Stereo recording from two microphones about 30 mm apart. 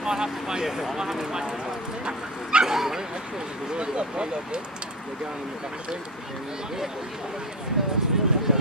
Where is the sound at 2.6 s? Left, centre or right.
Centre.